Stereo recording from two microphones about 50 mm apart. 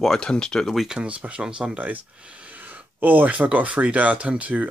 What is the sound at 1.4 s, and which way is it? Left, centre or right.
Speech, centre.